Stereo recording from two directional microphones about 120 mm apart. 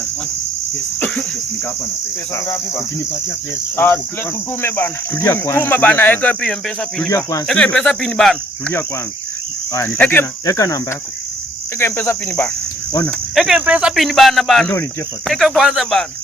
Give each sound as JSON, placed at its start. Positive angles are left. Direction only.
{"t": 0.9, "sound": "cricket", "side_deg": 10}
{"t": 2.3, "sound": "cricket", "side_deg": 25}
{"t": 3.8, "sound": "speech", "side_deg": 15}
{"t": 7.1, "sound": "cricket", "side_deg": 25}
{"t": 7.4, "sound": "cricket", "side_deg": 10}
{"t": 10.0, "sound": "speech", "side_deg": 15}
{"t": 10.4, "sound": "cricket", "side_deg": 25}
{"t": 11.8, "sound": "cricket", "side_deg": 20}
{"t": 13.3, "sound": "cricket", "side_deg": 0}
{"t": 13.7, "sound": "speech", "side_deg": -10}
{"t": 13.9, "sound": "cricket", "side_deg": 0}